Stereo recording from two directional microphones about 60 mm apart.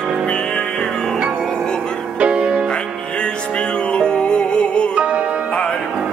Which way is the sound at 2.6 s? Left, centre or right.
Centre.